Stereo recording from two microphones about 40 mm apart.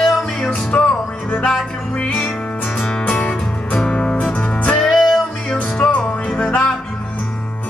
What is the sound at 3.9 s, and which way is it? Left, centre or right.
Music, left.